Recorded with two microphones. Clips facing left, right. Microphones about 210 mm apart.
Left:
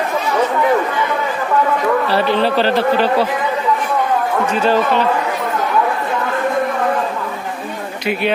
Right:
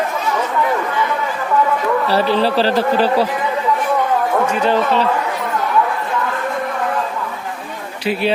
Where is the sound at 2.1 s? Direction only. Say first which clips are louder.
Even; 35° right (ahead or behind).